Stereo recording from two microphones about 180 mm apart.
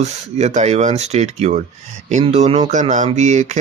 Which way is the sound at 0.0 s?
40° right (ahead or behind).